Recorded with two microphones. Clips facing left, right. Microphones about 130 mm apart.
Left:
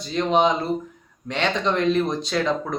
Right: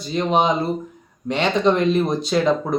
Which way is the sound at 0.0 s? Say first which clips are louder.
Right 1 dB; 5° right (ahead or behind).